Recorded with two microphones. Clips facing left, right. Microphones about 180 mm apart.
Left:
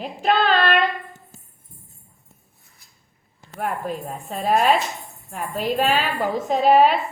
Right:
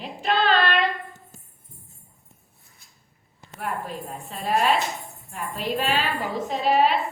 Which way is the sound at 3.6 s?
45° left (ahead or behind).